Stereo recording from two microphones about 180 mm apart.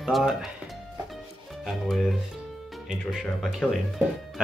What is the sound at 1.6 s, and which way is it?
Speech, centre (ahead or behind).